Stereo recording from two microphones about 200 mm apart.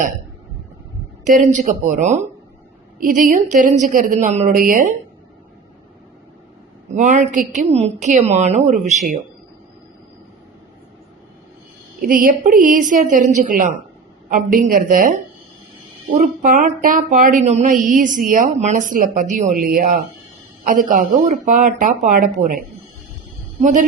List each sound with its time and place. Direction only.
1.2 s speech: 40° right (ahead or behind)
6.9 s speech: 35° right (ahead or behind)
12.0 s a woman's voice: 45° right (ahead or behind)